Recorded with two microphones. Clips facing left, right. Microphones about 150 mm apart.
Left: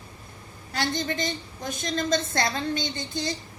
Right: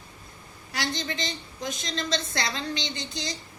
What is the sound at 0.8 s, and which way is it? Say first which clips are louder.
A woman's voice: left 3 dB; 50° left (ahead or behind).